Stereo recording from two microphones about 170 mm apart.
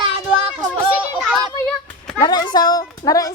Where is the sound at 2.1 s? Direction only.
20° left (ahead or behind).